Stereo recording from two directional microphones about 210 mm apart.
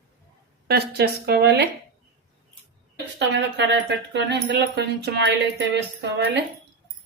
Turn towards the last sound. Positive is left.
turn(degrees=-55)  # may be behind; listen again after turning